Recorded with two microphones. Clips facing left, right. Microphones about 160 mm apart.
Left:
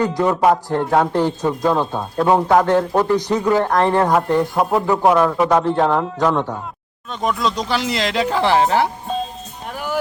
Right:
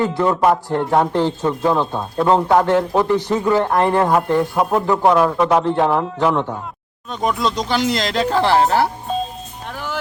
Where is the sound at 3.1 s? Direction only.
15° left (ahead or behind).